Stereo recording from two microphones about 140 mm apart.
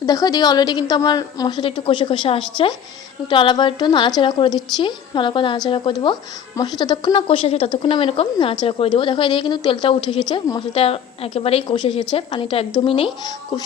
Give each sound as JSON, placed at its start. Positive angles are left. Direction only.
{"t": 0.0, "sound": "a woman's voice", "side_deg": 25}